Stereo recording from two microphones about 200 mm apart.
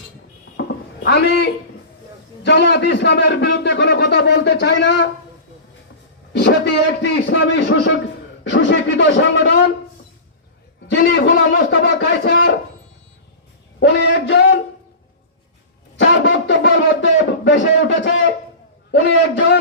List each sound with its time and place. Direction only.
0.6 s music: 65° left (ahead or behind)
1.0 s a man's voice: 60° left (ahead or behind)
7.0 s a man's voice: 65° left (ahead or behind)
10.8 s a man's voice: 60° left (ahead or behind)
13.7 s speech: 60° left (ahead or behind)
16.0 s a sound: 65° left (ahead or behind)
18.9 s a man's voice: 65° left (ahead or behind)